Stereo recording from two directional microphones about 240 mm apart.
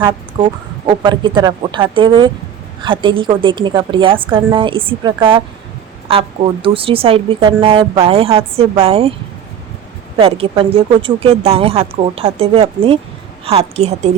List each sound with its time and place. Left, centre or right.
0.0 s a woman's voice: centre
10.2 s a woman's voice: right